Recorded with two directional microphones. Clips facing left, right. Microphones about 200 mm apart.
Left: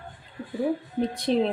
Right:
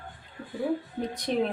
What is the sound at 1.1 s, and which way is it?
Speech, 30° left (ahead or behind).